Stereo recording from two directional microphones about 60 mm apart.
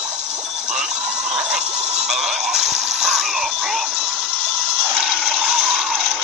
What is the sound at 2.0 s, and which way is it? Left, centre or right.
Music, centre.